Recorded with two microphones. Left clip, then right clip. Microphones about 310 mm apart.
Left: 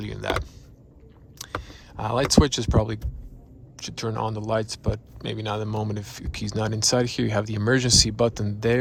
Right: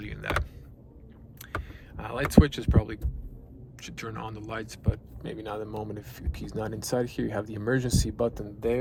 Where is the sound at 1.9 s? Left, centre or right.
Centre.